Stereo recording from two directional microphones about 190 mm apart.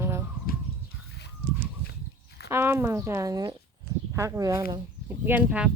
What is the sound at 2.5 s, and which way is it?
Speech, 15° right (ahead or behind).